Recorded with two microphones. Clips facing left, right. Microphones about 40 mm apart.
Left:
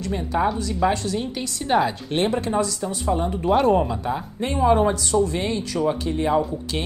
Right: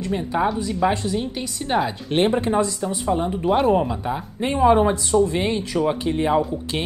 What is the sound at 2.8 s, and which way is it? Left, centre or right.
A woman's voice, centre.